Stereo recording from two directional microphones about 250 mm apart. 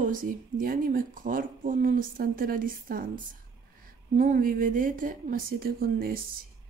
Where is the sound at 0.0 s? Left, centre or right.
Right.